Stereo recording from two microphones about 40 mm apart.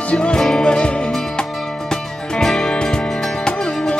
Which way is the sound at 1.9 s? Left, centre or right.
Centre.